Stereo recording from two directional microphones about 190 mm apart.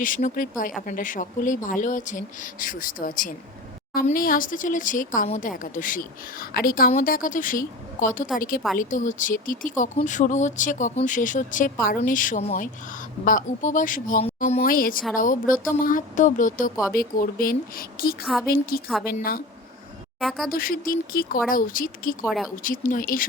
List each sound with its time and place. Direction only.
0.0 s speech: 45° left (ahead or behind)
20.1 s speech: centre (ahead or behind)
20.5 s speech: 50° left (ahead or behind)
22.3 s speech: centre (ahead or behind)
22.6 s speech: 45° left (ahead or behind)